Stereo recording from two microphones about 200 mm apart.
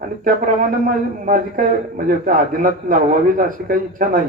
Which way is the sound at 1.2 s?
45° right (ahead or behind).